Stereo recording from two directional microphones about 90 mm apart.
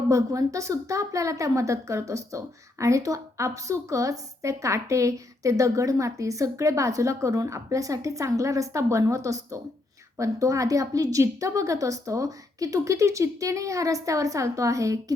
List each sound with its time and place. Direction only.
0.1 s a woman's voice: 40° right (ahead or behind)